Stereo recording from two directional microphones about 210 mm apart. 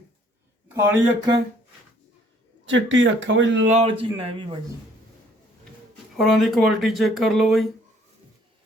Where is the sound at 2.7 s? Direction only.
65° right (ahead or behind).